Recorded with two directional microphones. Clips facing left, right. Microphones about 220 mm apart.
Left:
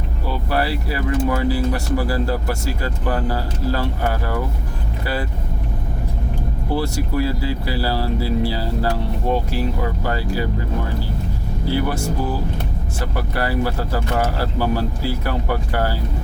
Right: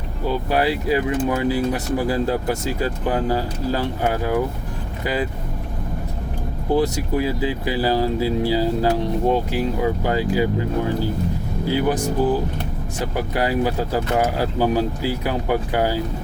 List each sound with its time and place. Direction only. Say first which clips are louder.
0.5 s speech: right 3 dB; 15° right (ahead or behind)
6.7 s speech: right 2 dB; 15° right (ahead or behind)
11.7 s speech: right 2 dB; 15° right (ahead or behind)